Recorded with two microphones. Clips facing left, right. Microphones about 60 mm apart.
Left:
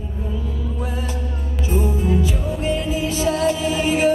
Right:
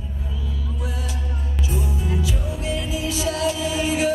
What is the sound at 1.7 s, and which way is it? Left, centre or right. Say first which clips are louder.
Music: left 8 dB; left.